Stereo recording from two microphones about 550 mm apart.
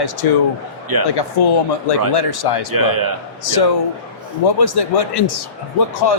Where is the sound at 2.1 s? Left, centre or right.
Left.